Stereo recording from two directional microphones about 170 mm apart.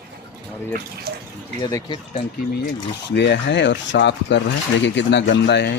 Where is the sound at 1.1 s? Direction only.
75° right (ahead or behind).